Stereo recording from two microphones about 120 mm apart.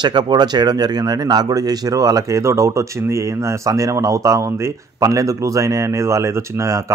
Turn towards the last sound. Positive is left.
turn(degrees=-25)  # may be behind; listen again after turning